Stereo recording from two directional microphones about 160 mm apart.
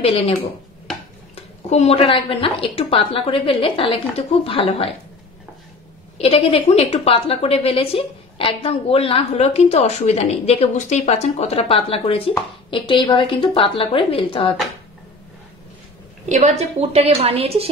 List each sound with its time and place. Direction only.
0.0 s a woman's voice: 35° left (ahead or behind)
6.1 s a woman's voice: 35° left (ahead or behind)
16.3 s a woman's voice: 45° right (ahead or behind)